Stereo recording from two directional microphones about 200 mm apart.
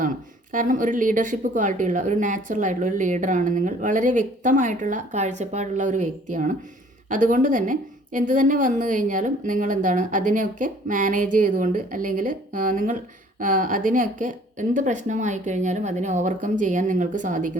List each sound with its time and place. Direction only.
0.5 s a woman's voice: 40° right (ahead or behind)